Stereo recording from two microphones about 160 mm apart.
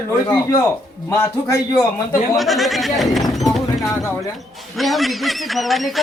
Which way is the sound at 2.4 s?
Centre (ahead or behind).